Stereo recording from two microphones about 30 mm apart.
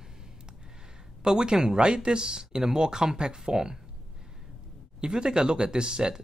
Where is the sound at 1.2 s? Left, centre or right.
Right.